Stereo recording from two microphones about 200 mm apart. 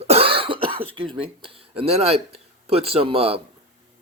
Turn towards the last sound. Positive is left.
turn(degrees=-30)  # may be behind; listen again after turning